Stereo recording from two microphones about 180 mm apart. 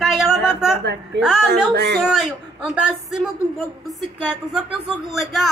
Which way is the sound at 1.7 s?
65° right (ahead or behind).